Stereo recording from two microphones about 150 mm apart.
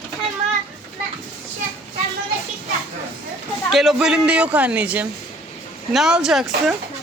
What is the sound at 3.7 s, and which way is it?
Speech, centre (ahead or behind).